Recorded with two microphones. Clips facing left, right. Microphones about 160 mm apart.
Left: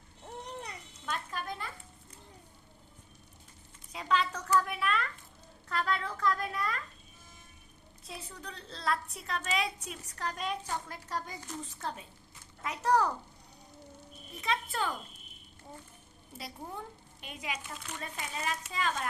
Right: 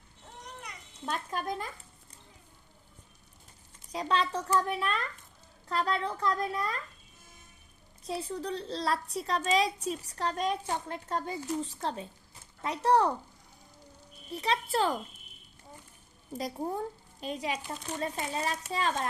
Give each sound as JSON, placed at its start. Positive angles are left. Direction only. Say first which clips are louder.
{"t": 0.4, "sound": "a sound", "louder": "left 2 dB", "side_deg": 30}
{"t": 1.0, "sound": "speech", "louder": "right 4 dB", "side_deg": -40}
{"t": 3.9, "sound": "speech", "louder": "right 2 dB", "side_deg": -35}
{"t": 8.0, "sound": "speech", "louder": "right 11 dB", "side_deg": -35}
{"t": 14.3, "sound": "speech", "louder": "right 4 dB", "side_deg": -35}
{"t": 16.4, "sound": "speech", "louder": "right 9 dB", "side_deg": -40}